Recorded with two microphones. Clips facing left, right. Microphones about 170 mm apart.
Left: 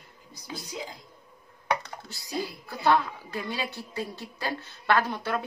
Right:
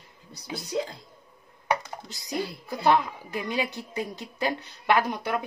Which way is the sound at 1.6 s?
20° right (ahead or behind).